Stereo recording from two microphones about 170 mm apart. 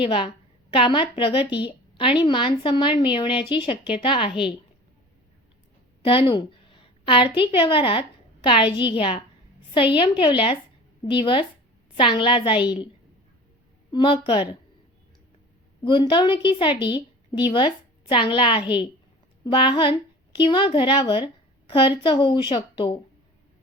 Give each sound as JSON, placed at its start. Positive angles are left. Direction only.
{"t": 0.0, "sound": "a woman's voice", "side_deg": 30}
{"t": 6.0, "sound": "a woman's voice", "side_deg": 30}
{"t": 13.9, "sound": "a woman's voice", "side_deg": 30}
{"t": 15.8, "sound": "a woman's voice", "side_deg": 30}
{"t": 18.6, "sound": "a woman's voice", "side_deg": -10}
{"t": 19.5, "sound": "a woman's voice", "side_deg": 30}